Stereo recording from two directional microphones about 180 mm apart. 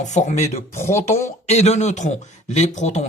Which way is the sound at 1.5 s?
35° left (ahead or behind).